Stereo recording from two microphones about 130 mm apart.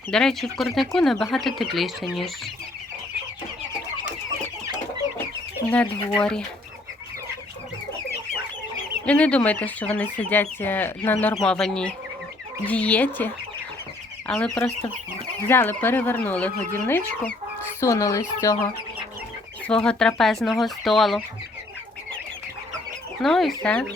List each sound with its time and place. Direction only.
0.1 s speech: 5° left (ahead or behind)
6.1 s speech: 5° left (ahead or behind)
9.0 s speech: 10° left (ahead or behind)
11.3 s speech: 5° left (ahead or behind); by 18.7 s 25° left (ahead or behind)
19.6 s speech: 5° left (ahead or behind)
23.2 s speech: centre (ahead or behind)